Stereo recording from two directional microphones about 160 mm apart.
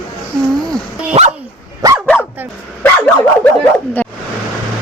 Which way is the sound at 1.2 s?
40° right (ahead or behind).